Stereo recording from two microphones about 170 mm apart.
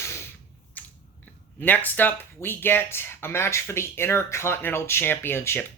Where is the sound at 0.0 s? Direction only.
15° left (ahead or behind).